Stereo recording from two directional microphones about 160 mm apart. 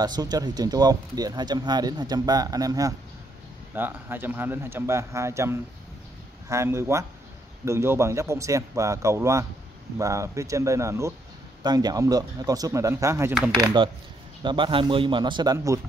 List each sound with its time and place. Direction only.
0.0 s speech: 25° right (ahead or behind)
3.7 s speech: 10° right (ahead or behind)
14.4 s speech: 30° right (ahead or behind)